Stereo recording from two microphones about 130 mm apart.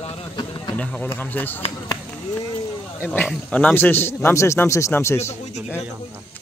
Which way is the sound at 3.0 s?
15° left (ahead or behind).